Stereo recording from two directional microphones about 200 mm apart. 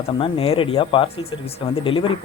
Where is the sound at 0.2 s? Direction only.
30° left (ahead or behind).